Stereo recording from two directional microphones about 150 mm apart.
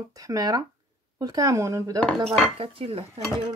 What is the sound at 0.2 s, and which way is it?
Speech, 25° right (ahead or behind).